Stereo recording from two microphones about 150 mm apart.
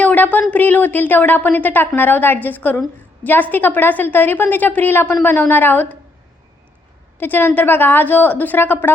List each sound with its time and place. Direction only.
0.0 s a sound: 10° left (ahead or behind)
0.5 s speech: 10° left (ahead or behind)
7.2 s speech: 15° left (ahead or behind)